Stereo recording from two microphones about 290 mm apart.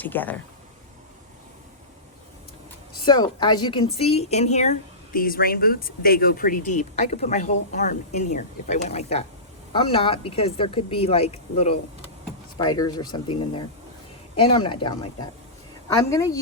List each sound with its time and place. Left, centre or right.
0.0 s speech: centre
3.0 s a woman's voice: centre